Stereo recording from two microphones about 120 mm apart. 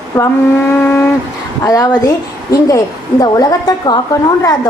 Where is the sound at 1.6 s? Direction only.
30° left (ahead or behind).